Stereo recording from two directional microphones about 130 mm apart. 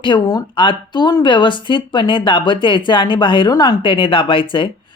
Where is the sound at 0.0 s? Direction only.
35° left (ahead or behind).